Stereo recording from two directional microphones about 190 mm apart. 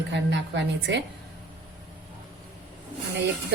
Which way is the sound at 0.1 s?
70° right (ahead or behind).